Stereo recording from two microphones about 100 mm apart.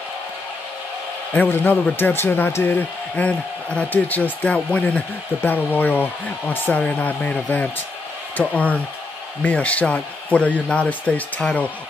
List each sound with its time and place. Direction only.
1.3 s a man's voice: 20° left (ahead or behind)